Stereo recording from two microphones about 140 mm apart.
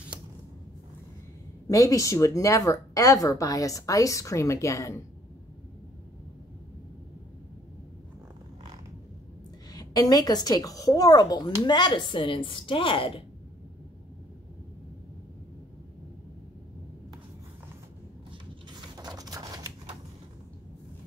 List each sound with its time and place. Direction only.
1.7 s speech: 25° left (ahead or behind)
9.7 s speech: 25° left (ahead or behind)
18.9 s a sound: 30° right (ahead or behind)